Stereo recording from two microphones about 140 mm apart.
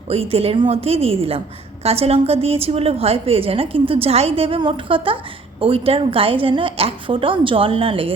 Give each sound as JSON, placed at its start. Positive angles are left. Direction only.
{"t": 0.1, "sound": "a woman's voice", "side_deg": -45}